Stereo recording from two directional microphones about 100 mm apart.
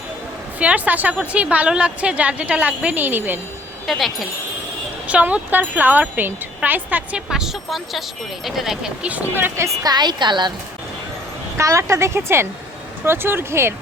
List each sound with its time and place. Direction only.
0.6 s a woman's voice: 15° right (ahead or behind)
3.8 s speech: centre (ahead or behind)
5.0 s a woman's voice: 15° right (ahead or behind)
7.3 s a woman's voice: 5° right (ahead or behind); by 9.6 s 20° right (ahead or behind)
9.8 s a woman's voice: 45° right (ahead or behind)
11.5 s speech: 30° right (ahead or behind)